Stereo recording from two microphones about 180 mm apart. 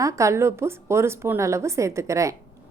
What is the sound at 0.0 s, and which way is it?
A woman's voice, 15° right (ahead or behind).